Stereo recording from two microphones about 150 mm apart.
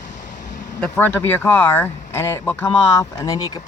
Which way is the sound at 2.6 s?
25° left (ahead or behind).